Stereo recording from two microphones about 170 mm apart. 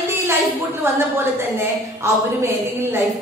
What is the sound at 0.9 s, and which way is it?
A woman's voice, 15° right (ahead or behind).